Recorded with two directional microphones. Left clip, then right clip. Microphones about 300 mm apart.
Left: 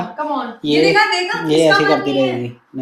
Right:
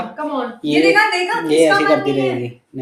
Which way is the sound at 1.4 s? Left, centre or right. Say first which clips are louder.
Left 1 dB; centre.